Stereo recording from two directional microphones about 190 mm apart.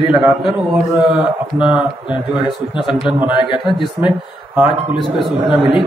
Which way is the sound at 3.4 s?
25° left (ahead or behind).